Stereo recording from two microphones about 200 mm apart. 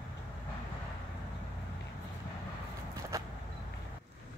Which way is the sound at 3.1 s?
15° right (ahead or behind).